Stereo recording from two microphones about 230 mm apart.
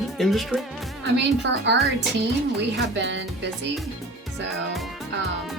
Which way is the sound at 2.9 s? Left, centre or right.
Right.